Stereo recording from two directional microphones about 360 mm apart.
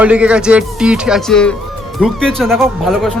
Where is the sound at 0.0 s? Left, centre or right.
Centre.